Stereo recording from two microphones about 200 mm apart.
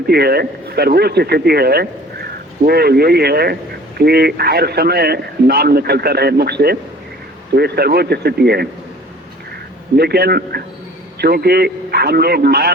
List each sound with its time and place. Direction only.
0.1 s speech: 50° right (ahead or behind)
9.9 s speech: 50° right (ahead or behind)